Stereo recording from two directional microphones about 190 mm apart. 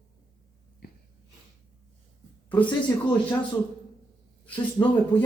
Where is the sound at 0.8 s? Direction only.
55° left (ahead or behind).